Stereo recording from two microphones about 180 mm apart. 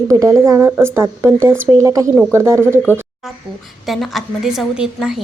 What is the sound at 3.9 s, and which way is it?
A woman's voice, centre (ahead or behind).